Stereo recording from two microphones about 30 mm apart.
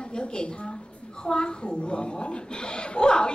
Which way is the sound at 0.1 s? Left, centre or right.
Left.